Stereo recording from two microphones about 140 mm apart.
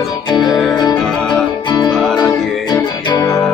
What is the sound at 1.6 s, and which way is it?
Music, 30° left (ahead or behind).